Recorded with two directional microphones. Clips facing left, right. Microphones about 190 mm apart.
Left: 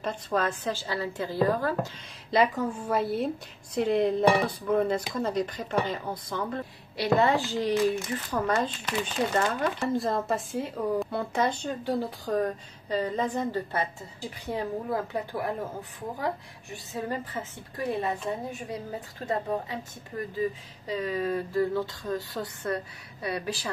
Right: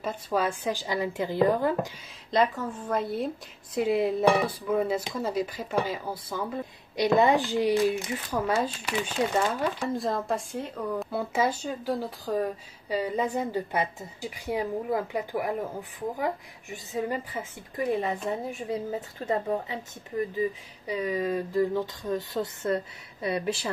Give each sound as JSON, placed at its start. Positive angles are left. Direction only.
{"t": 0.0, "sound": "speech", "side_deg": -5}
{"t": 2.3, "sound": "a woman's voice", "side_deg": 15}
{"t": 16.7, "sound": "a woman's voice", "side_deg": -15}